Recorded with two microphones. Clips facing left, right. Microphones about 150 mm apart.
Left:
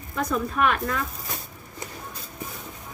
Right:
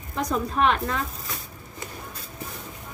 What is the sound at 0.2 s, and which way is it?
Speech, 35° right (ahead or behind).